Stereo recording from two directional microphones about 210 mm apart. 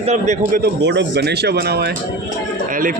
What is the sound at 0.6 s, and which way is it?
Speech, 55° right (ahead or behind).